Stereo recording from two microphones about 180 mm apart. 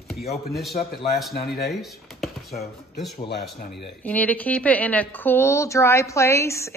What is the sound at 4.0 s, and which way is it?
A woman's voice, 10° left (ahead or behind).